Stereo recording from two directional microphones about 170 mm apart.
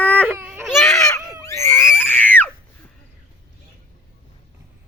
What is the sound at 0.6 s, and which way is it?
Baby cry, centre (ahead or behind).